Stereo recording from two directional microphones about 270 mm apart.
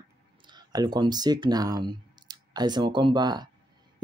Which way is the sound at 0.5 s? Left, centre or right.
Centre.